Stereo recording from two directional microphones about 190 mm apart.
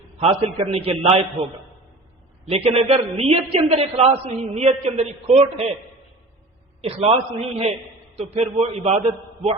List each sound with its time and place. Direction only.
0.2 s a man's voice: 35° right (ahead or behind)
2.5 s a man's voice: 35° right (ahead or behind)
6.8 s a man's voice: 30° right (ahead or behind)